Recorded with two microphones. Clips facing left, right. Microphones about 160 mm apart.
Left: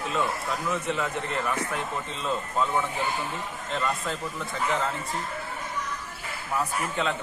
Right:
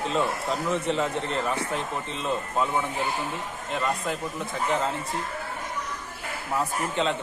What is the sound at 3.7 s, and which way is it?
Speech, 15° right (ahead or behind).